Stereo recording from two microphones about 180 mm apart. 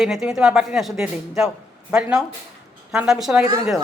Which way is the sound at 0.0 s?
Centre (ahead or behind).